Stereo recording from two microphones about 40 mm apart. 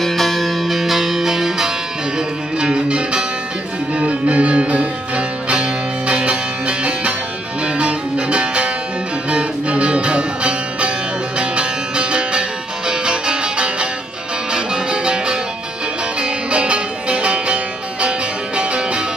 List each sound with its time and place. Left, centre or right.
0.0 s music: centre; by 15.4 s right
16.5 s music: right